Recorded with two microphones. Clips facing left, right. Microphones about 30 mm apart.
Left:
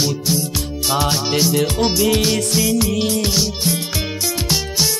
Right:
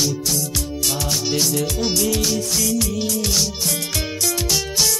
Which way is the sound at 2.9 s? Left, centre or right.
Left.